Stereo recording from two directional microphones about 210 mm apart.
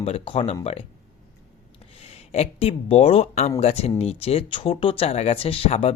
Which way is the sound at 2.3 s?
30° left (ahead or behind).